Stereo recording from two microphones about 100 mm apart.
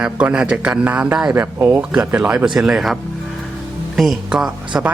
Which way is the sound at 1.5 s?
20° right (ahead or behind).